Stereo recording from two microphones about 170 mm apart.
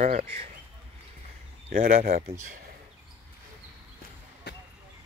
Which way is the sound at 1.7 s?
50° right (ahead or behind).